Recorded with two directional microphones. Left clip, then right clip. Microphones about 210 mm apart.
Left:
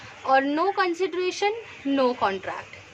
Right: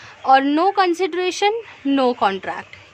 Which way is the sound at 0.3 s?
50° right (ahead or behind).